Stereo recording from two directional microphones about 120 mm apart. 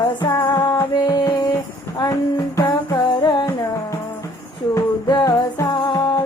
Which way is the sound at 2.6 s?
40° left (ahead or behind).